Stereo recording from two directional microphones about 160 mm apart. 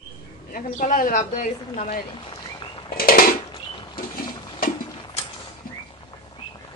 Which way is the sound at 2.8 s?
70° left (ahead or behind).